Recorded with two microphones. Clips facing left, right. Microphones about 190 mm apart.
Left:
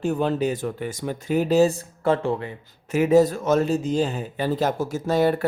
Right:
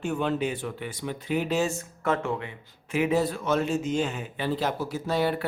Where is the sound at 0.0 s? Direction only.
35° left (ahead or behind).